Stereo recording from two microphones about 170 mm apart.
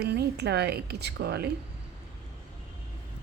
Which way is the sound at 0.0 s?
75° right (ahead or behind).